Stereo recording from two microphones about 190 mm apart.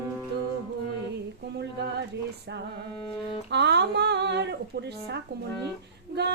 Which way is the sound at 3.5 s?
65° right (ahead or behind).